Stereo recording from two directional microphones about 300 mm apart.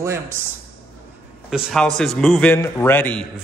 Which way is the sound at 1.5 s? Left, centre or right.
Centre.